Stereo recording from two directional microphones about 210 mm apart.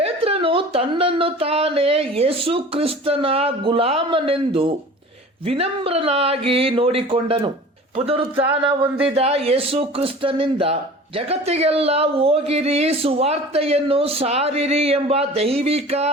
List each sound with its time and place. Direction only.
0.0 s speech: 25° right (ahead or behind)